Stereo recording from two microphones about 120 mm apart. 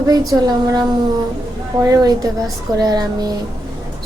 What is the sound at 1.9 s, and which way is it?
Speech, 30° right (ahead or behind).